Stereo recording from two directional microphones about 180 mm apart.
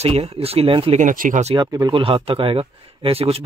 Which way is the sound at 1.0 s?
45° right (ahead or behind).